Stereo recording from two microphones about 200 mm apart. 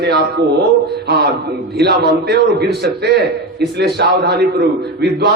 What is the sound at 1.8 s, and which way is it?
A man's voice, 55° right (ahead or behind).